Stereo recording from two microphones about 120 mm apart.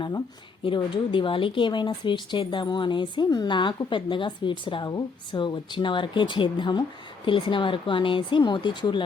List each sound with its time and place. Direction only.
0.6 s speech: 45° left (ahead or behind)